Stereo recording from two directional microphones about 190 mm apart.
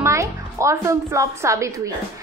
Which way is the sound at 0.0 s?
15° right (ahead or behind).